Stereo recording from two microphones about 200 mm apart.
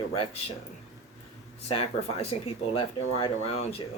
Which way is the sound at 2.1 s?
30° left (ahead or behind).